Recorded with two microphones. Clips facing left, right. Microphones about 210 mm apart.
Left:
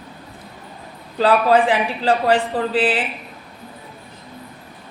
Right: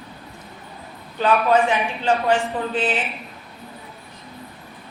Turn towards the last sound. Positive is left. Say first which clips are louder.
# left 4 dB
turn(degrees=35)  # may be behind; listen again after turning